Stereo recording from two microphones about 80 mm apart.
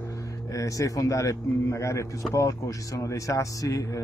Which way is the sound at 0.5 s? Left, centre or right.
Left.